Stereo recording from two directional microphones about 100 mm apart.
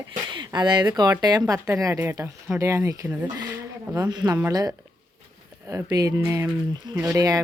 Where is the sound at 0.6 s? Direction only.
45° right (ahead or behind).